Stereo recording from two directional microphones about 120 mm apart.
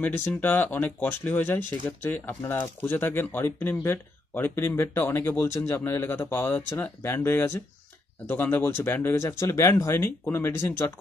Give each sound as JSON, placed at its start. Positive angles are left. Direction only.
{"t": 0.0, "sound": "speech", "side_deg": 15}
{"t": 8.3, "sound": "speech", "side_deg": 15}